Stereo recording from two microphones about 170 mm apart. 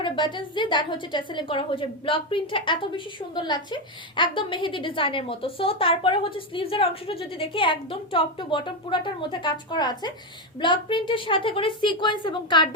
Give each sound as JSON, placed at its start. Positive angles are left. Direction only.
{"t": 0.0, "sound": "a woman's voice", "side_deg": 30}